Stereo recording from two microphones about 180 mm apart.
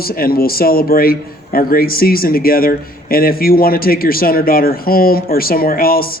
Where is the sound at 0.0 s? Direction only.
55° left (ahead or behind).